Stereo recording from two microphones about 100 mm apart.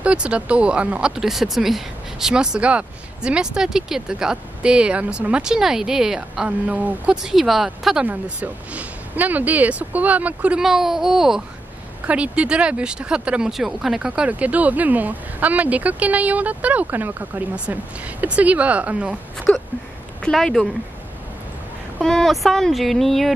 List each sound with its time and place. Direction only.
0.0 s speech: 10° right (ahead or behind)
8.1 s speech: 15° right (ahead or behind)
10.6 s speech: 5° right (ahead or behind)
19.5 s a woman's voice: 15° left (ahead or behind)
22.0 s speech: 5° left (ahead or behind)